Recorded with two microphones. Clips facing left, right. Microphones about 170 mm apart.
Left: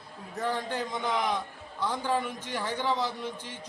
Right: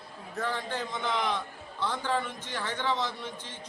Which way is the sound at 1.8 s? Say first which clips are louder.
Left 1 dB; 10° left (ahead or behind).